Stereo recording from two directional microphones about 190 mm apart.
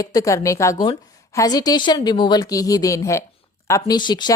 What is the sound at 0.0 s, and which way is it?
A woman's voice, 20° left (ahead or behind).